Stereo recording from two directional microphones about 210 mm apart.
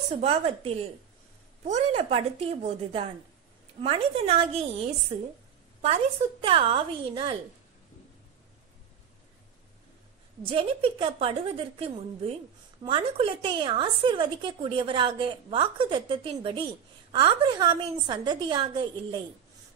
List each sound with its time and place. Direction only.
0.1 s a woman's voice: 30° right (ahead or behind)
6.4 s a woman's voice: 25° right (ahead or behind)
10.4 s a woman's voice: 25° right (ahead or behind)